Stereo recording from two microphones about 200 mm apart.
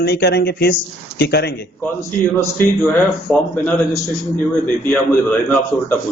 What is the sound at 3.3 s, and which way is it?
Speech, 5° left (ahead or behind).